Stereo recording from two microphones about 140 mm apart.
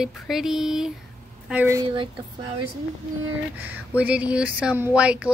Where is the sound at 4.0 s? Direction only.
10° right (ahead or behind).